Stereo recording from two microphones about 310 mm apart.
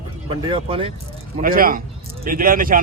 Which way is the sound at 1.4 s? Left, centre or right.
Right.